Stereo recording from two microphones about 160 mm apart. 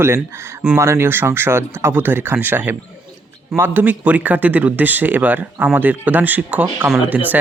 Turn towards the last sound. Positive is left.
turn(degrees=-10)  # may be behind; listen again after turning